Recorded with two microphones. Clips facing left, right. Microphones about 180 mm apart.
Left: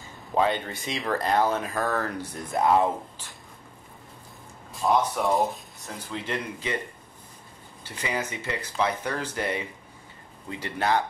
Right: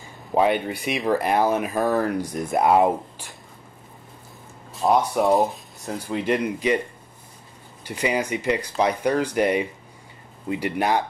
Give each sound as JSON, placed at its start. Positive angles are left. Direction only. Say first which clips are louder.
{"t": 0.3, "sound": "speech", "louder": "right 4 dB", "side_deg": -15}
{"t": 4.8, "sound": "speech", "louder": "right 4 dB", "side_deg": -40}
{"t": 5.2, "sound": "speech", "louder": "right 5 dB", "side_deg": 0}
{"t": 6.1, "sound": "speech", "louder": "right 9 dB", "side_deg": -15}
{"t": 7.8, "sound": "speech", "louder": "right 7 dB", "side_deg": -15}